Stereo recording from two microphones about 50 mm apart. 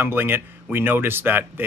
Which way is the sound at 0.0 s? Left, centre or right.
Right.